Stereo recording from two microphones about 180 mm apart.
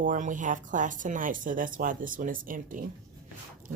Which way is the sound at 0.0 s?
45° right (ahead or behind).